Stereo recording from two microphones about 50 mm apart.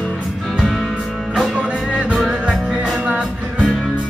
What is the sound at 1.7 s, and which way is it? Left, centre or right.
Music, right.